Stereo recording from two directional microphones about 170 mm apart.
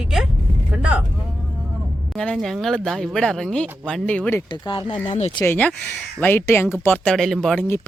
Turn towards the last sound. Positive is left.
turn(degrees=10)  # may be behind; listen again after turning